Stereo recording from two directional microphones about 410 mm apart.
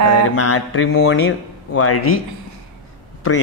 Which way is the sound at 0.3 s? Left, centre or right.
Left.